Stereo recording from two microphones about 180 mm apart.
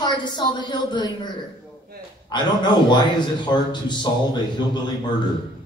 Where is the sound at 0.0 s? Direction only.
25° left (ahead or behind).